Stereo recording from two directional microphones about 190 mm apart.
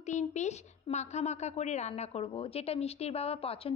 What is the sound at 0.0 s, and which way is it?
A woman's voice, 40° left (ahead or behind).